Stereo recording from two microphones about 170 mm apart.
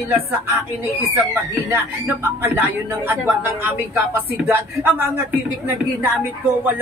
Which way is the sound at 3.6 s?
10° right (ahead or behind).